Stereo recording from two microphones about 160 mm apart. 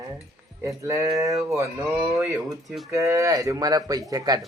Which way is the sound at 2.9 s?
20° right (ahead or behind).